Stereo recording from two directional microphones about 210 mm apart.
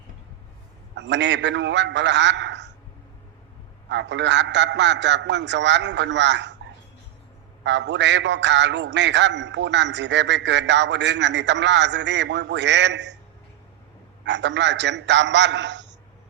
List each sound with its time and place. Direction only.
0.9 s a man's voice: 55° right (ahead or behind)
3.8 s a man's voice: 55° right (ahead or behind)
7.6 s a man's voice: 55° right (ahead or behind)
14.3 s a man's voice: 55° right (ahead or behind)